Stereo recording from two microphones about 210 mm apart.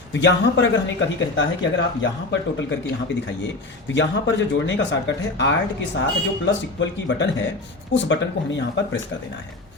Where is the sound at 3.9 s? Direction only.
60° left (ahead or behind).